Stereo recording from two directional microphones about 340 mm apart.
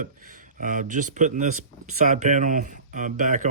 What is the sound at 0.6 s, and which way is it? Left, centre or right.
Speech, right.